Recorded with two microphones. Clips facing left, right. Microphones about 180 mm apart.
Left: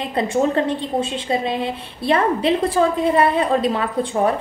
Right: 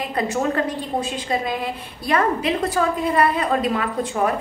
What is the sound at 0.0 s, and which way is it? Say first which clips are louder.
A woman's voice: left 3 dB; 25° left (ahead or behind).